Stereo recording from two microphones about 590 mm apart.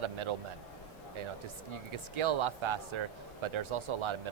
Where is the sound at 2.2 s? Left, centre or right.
Right.